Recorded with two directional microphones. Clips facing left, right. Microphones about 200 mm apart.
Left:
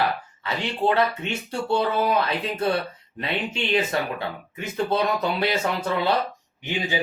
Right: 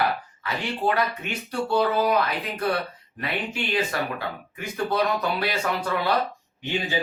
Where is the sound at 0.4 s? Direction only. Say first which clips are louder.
Left 2 dB; 25° left (ahead or behind).